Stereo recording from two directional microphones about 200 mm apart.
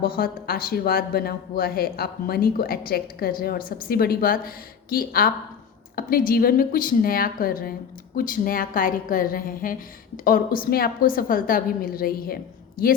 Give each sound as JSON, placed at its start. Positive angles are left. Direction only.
{"t": 0.2, "sound": "a woman's voice", "side_deg": 50}